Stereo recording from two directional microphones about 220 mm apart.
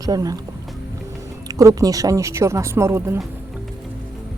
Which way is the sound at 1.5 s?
15° right (ahead or behind).